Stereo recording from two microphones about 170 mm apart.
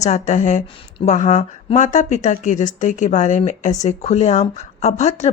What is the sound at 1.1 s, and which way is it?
A woman's voice, 45° left (ahead or behind).